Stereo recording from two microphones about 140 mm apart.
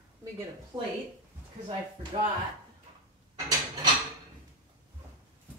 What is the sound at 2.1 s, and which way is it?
Speech, 45° right (ahead or behind).